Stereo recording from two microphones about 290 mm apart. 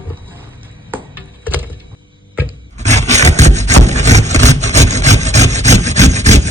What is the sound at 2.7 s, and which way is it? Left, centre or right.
Sawing, right.